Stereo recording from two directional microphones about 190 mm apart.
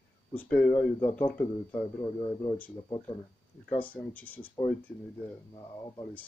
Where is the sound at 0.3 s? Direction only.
10° left (ahead or behind).